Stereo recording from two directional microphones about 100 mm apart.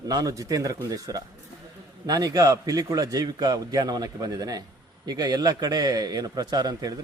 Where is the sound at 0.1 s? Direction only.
35° right (ahead or behind).